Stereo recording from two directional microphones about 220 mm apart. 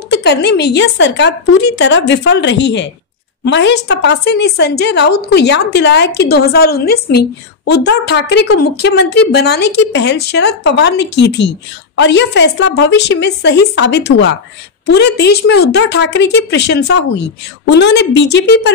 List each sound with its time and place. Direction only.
0.1 s a woman's voice: 50° left (ahead or behind)